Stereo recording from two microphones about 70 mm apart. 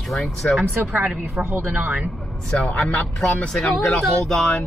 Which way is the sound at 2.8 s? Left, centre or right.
Centre.